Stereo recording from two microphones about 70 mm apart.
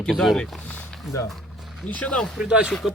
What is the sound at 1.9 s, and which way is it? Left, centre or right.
Speech, centre.